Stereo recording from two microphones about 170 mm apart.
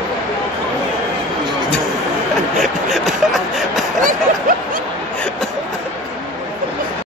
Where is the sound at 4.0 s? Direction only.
55° right (ahead or behind).